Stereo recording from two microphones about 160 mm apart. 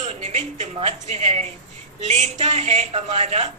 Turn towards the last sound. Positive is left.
turn(degrees=-45)  # may be behind; listen again after turning